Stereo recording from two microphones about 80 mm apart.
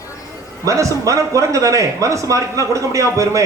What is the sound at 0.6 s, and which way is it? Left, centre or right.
A man's voice, right.